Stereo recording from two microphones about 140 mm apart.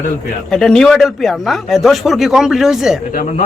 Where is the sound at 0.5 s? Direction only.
5° left (ahead or behind).